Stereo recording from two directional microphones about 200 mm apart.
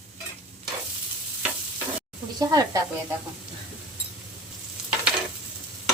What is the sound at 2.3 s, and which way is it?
Speech, 20° right (ahead or behind).